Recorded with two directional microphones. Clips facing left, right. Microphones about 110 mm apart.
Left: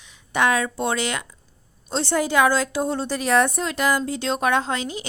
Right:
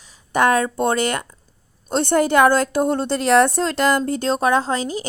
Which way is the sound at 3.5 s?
30° right (ahead or behind).